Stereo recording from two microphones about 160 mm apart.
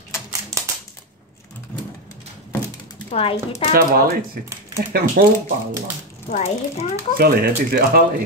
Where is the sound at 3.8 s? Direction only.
70° right (ahead or behind).